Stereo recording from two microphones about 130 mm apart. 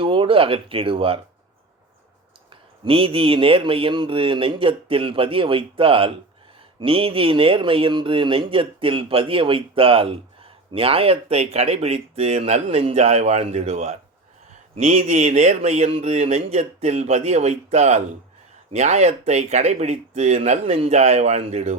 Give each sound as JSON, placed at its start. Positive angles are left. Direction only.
{"t": 0.0, "sound": "speech", "side_deg": -45}
{"t": 2.8, "sound": "speech", "side_deg": -45}